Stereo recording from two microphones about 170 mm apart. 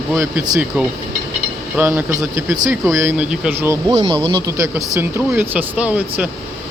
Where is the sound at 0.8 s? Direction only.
10° right (ahead or behind).